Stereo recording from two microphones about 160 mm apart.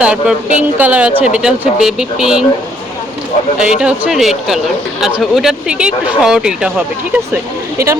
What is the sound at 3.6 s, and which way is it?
Speech, 5° right (ahead or behind).